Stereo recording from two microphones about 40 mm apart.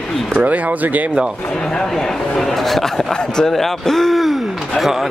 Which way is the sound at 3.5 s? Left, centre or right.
Centre.